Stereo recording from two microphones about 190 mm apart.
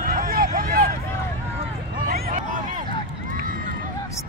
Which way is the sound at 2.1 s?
45° right (ahead or behind).